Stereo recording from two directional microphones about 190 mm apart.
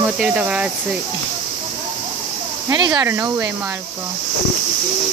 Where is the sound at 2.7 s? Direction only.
25° right (ahead or behind).